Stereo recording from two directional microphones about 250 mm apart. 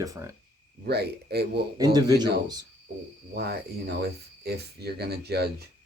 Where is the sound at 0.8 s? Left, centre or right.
Right.